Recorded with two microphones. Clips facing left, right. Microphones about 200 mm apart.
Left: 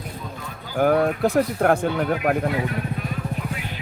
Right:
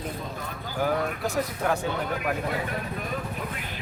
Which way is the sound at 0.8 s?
50° left (ahead or behind).